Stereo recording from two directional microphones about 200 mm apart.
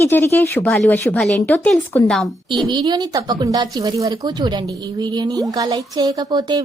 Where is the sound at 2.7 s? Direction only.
20° right (ahead or behind).